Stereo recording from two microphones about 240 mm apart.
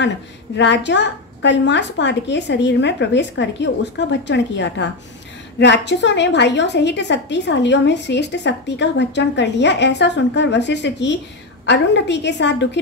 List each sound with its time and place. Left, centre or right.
0.6 s a woman's voice: left